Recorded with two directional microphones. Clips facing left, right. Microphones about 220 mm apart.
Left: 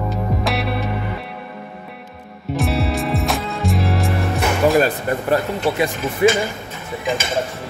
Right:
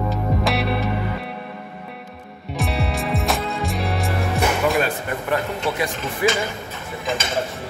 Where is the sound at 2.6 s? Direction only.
Centre (ahead or behind).